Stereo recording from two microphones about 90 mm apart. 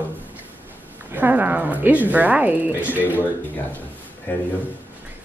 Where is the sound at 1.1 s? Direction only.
20° right (ahead or behind).